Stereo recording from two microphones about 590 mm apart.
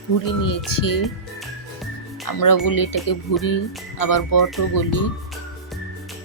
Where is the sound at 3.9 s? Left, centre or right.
Left.